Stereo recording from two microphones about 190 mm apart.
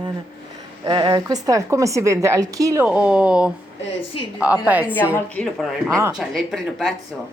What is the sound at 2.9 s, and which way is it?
A woman's voice, 5° right (ahead or behind).